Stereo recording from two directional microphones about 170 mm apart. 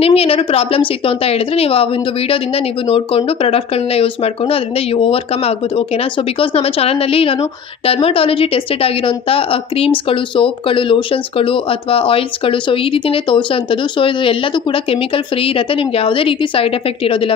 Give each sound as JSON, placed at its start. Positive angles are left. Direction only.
{"t": 0.0, "sound": "a woman's voice", "side_deg": 35}